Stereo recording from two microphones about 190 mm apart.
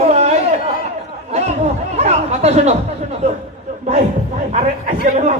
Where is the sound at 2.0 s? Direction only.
35° right (ahead or behind).